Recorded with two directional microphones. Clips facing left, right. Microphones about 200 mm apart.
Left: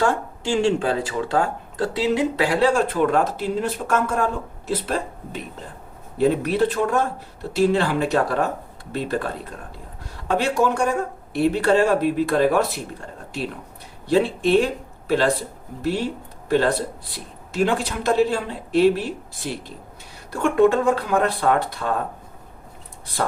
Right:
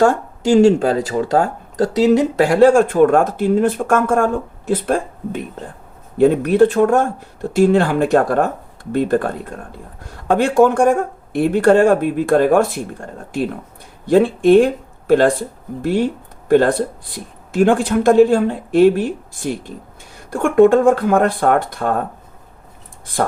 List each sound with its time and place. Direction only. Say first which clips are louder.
0.0 s speech: right 7 dB; 40° right (ahead or behind)